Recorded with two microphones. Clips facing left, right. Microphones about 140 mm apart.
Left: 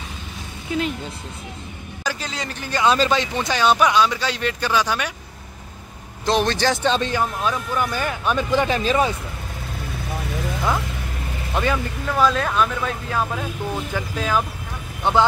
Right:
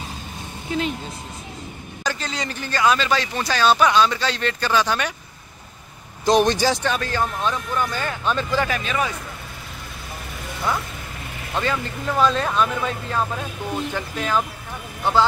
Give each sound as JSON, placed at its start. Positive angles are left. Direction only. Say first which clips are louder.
{"t": 0.7, "sound": "speech", "louder": "left 1 dB", "side_deg": 5}
{"t": 2.0, "sound": "speech", "louder": "right 1 dB", "side_deg": 5}
{"t": 2.7, "sound": "a man's voice", "louder": "left 2 dB", "side_deg": 25}
{"t": 6.2, "sound": "a man's voice", "louder": "right 2 dB", "side_deg": -15}
{"t": 6.8, "sound": "a man's voice", "louder": "left 3 dB", "side_deg": 20}
{"t": 7.2, "sound": "speech", "louder": "left 1 dB", "side_deg": 10}
{"t": 11.5, "sound": "speech", "louder": "left 2 dB", "side_deg": 15}
{"t": 12.2, "sound": "speech", "louder": "left 1 dB", "side_deg": 0}
{"t": 15.0, "sound": "a man's voice", "louder": "left 1 dB", "side_deg": 20}